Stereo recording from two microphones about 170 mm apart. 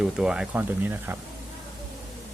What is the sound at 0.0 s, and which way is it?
Speech, 5° right (ahead or behind).